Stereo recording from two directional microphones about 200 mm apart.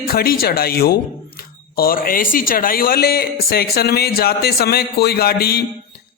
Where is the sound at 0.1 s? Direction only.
50° left (ahead or behind).